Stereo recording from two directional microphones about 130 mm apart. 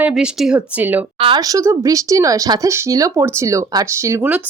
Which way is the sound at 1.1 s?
45° right (ahead or behind).